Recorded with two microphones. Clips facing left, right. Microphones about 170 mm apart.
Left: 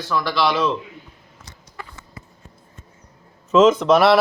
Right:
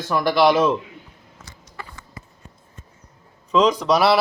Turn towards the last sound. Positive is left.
turn(degrees=0)  # may be behind; listen again after turning